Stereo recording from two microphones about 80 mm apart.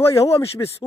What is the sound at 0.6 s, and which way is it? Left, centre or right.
Speech, left.